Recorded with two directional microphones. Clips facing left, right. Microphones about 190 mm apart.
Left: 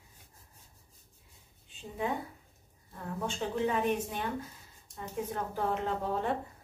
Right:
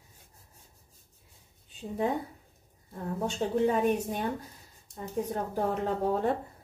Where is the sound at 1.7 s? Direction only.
40° right (ahead or behind).